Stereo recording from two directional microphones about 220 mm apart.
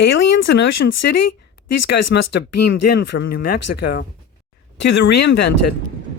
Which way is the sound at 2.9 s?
50° left (ahead or behind).